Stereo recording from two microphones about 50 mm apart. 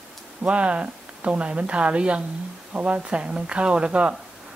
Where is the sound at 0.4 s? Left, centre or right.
Right.